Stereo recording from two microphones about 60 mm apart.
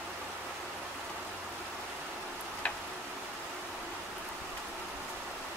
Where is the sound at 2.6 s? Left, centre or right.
Left.